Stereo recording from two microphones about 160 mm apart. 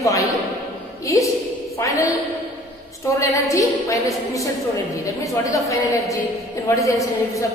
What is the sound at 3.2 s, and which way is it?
A woman's voice, 20° left (ahead or behind).